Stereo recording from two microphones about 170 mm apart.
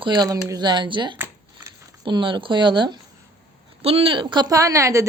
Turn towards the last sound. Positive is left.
turn(degrees=-20)  # may be behind; listen again after turning